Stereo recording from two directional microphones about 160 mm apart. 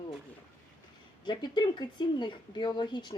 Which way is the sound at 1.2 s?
30° left (ahead or behind).